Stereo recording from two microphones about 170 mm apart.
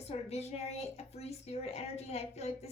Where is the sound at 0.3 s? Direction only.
40° left (ahead or behind).